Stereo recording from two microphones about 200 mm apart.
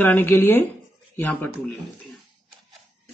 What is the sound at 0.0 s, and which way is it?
Speech, 10° left (ahead or behind).